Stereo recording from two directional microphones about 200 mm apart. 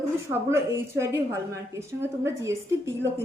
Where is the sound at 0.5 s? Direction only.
15° right (ahead or behind).